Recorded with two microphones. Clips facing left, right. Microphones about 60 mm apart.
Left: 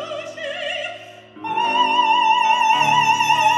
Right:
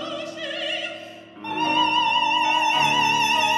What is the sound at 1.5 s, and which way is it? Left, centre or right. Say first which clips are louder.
Music: left 3 dB; centre.